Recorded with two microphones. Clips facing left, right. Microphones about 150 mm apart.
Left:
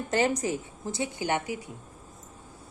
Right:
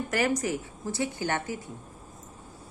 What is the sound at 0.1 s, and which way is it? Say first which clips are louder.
Speech: left 2 dB; 25° left (ahead or behind).